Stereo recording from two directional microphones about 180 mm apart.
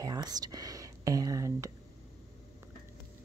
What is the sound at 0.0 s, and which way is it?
Whispering, 20° right (ahead or behind).